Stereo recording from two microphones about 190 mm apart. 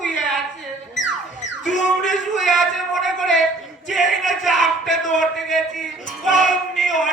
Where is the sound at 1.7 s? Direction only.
40° left (ahead or behind).